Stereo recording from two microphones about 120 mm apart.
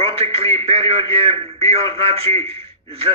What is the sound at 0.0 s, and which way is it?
A man's voice, 55° right (ahead or behind).